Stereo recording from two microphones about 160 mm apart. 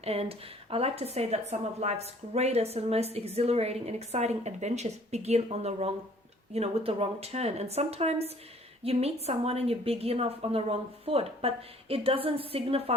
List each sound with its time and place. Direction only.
0.0 s a woman's voice: 40° right (ahead or behind)